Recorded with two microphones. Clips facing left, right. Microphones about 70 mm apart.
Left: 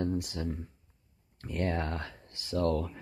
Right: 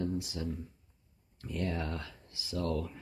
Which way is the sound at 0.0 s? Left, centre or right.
Left.